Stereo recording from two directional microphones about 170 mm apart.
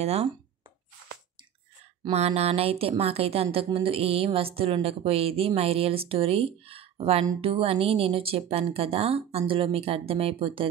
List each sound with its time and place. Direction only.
0.0 s speech: 35° right (ahead or behind)
2.0 s speech: 40° right (ahead or behind)